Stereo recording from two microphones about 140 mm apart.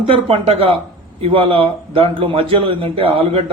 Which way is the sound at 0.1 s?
45° right (ahead or behind).